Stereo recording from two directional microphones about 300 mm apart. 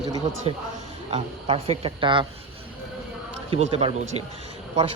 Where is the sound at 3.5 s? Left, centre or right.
Centre.